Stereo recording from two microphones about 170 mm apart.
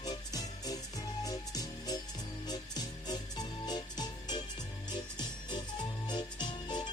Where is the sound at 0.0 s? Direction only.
20° left (ahead or behind).